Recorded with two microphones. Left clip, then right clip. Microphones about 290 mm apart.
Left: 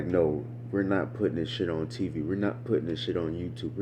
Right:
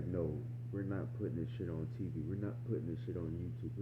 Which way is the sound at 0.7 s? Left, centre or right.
Left.